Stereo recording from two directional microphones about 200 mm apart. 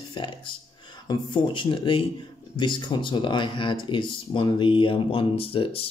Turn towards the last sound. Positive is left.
turn(degrees=30)  # may be behind; listen again after turning